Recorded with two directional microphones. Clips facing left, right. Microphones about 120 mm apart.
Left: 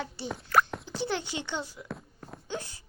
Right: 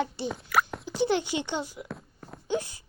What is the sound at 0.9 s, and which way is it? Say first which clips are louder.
A child's voice: right 6 dB; 15° right (ahead or behind).